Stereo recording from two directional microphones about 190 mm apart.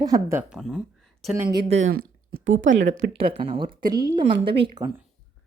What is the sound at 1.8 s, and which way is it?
Speech, 90° right.